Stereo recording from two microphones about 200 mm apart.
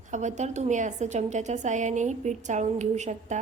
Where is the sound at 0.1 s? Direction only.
35° right (ahead or behind).